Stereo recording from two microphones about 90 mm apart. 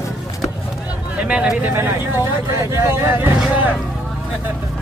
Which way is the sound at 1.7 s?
30° right (ahead or behind).